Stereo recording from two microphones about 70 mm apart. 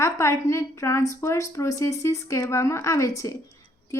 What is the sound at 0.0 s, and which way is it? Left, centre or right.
A woman's voice, left.